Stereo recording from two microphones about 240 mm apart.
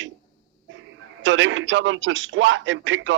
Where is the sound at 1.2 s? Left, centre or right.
Right.